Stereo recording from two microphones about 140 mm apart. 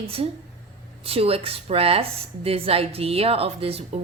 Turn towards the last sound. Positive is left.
turn(degrees=-45)  # may be behind; listen again after turning